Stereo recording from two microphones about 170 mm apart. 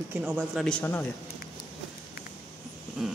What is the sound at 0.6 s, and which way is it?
Speech, 10° left (ahead or behind).